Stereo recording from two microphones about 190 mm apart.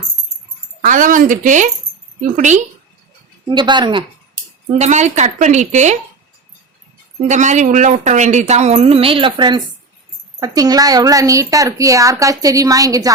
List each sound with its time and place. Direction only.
0.8 s speech: 45° right (ahead or behind)
3.4 s speech: 25° right (ahead or behind)
4.8 s speech: 40° right (ahead or behind)
7.3 s a woman's voice: 40° right (ahead or behind); by 13.1 s 20° right (ahead or behind)